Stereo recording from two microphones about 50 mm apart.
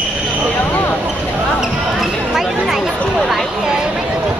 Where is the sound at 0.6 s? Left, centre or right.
Left.